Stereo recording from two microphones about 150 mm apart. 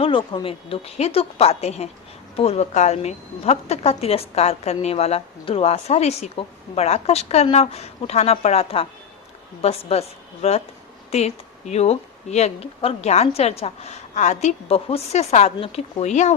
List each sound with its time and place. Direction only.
0.0 s a woman's voice: 35° left (ahead or behind); by 16.3 s 50° left (ahead or behind)